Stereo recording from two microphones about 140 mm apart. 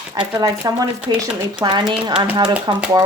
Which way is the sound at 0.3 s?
25° right (ahead or behind).